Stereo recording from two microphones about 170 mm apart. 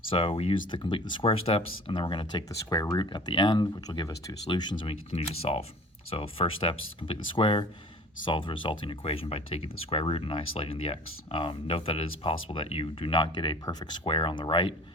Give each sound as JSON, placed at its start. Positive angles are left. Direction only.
{"t": 0.1, "sound": "speech", "side_deg": 35}